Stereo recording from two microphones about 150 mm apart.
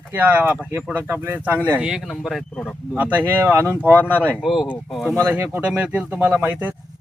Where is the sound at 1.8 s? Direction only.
5° right (ahead or behind).